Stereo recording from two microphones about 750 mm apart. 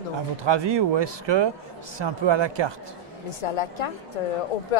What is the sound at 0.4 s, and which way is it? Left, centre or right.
Speech, right.